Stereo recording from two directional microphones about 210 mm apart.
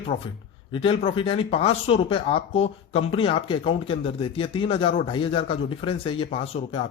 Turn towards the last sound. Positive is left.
turn(degrees=25)  # may be behind; listen again after turning